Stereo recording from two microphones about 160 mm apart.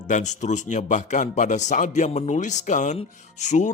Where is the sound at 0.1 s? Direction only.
50° left (ahead or behind).